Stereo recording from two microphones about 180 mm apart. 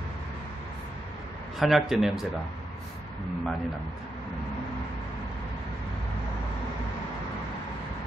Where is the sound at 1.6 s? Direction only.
Centre (ahead or behind).